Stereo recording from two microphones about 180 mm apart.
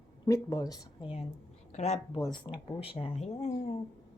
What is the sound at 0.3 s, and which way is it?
Speech, 20° left (ahead or behind).